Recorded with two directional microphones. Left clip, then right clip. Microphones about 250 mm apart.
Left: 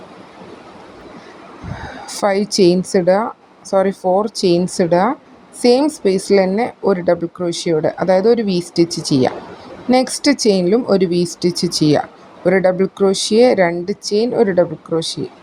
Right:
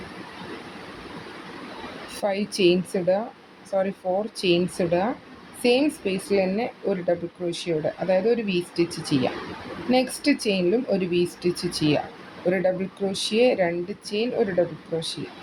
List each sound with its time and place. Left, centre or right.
2.0 s speech: left